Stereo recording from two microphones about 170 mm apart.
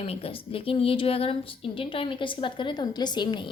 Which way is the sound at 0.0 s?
35° left (ahead or behind).